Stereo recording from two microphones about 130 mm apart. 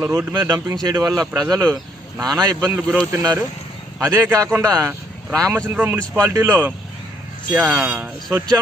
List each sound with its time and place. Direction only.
0.0 s speech: 20° right (ahead or behind)
2.6 s speech: 10° right (ahead or behind)